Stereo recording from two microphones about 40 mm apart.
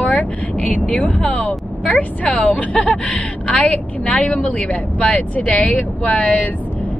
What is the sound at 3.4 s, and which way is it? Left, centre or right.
Speech, left.